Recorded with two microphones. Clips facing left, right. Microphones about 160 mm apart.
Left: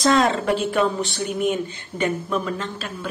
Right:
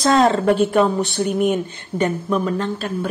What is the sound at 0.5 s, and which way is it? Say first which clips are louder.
Speech: right 5 dB; 55° right (ahead or behind).